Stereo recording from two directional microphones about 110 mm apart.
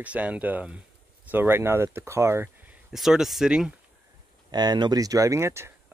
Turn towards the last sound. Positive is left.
turn(degrees=-25)  # may be behind; listen again after turning